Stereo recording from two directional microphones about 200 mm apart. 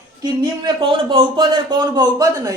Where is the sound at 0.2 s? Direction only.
25° right (ahead or behind).